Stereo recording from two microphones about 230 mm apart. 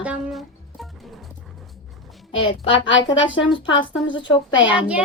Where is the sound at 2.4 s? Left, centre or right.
Left.